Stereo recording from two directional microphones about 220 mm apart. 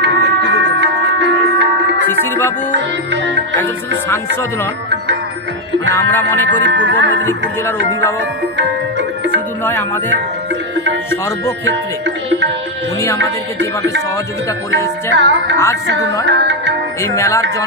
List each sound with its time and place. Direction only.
0.0 s music: 55° right (ahead or behind)
2.0 s music: 10° left (ahead or behind)
2.7 s music: 55° right (ahead or behind)
6.6 s music: 55° right (ahead or behind)
8.5 s music: 55° right (ahead or behind)
15.1 s music: 55° right (ahead or behind)
17.0 s music: 15° left (ahead or behind)